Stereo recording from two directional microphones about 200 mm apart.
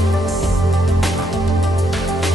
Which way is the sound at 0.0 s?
Centre (ahead or behind).